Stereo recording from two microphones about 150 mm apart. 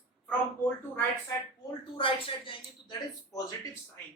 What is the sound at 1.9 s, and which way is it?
Speech, 35° left (ahead or behind).